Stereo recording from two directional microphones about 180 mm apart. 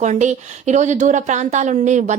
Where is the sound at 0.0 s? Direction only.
40° right (ahead or behind).